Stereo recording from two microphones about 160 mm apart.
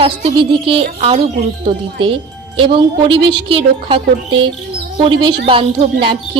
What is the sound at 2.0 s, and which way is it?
A woman's voice, 35° right (ahead or behind).